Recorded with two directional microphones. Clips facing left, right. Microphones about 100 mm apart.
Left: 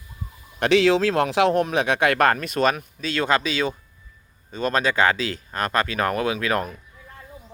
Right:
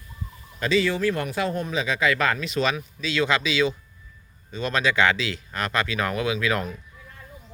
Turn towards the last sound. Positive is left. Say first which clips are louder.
# left 2 dB
turn(degrees=40)  # may be behind; listen again after turning